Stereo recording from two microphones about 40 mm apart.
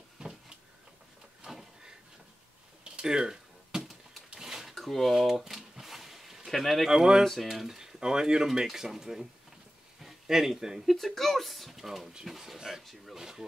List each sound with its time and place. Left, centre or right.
0.2 s a sound: centre
1.4 s a sound: centre
2.8 s computer keyboard: centre
4.4 s drawer open or close: centre
4.7 s speech: centre
5.5 s a sound: centre
6.5 s speech: centre
6.9 s speech: centre
7.2 s speech: centre
10.9 s speech: centre
13.2 s speech: centre